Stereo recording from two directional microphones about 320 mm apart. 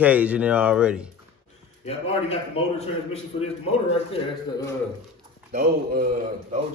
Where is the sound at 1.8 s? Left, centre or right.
Centre.